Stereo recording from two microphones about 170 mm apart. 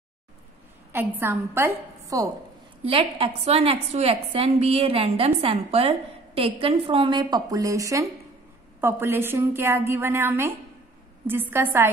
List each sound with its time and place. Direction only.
0.9 s a woman's voice: 15° right (ahead or behind)
2.8 s a woman's voice: 35° right (ahead or behind); by 11.9 s 10° right (ahead or behind)